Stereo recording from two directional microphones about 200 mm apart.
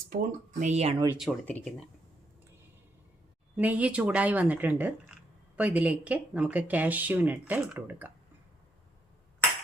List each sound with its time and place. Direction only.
0.1 s speech: 45° right (ahead or behind)
1.2 s speech: 5° left (ahead or behind)
3.6 s speech: 5° right (ahead or behind)